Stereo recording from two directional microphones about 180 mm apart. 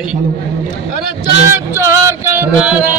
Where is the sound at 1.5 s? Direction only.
15° right (ahead or behind).